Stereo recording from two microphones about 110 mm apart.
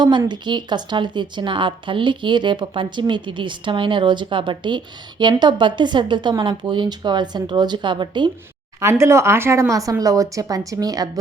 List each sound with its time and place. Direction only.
0.0 s a woman's voice: 40° right (ahead or behind)
8.8 s a woman's voice: 25° right (ahead or behind)